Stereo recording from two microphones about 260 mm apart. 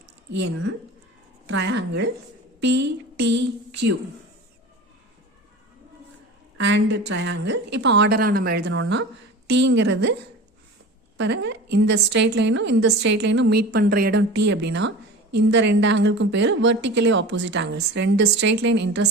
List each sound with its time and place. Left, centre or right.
0.3 s a woman's voice: right
6.6 s a woman's voice: right
11.2 s a woman's voice: right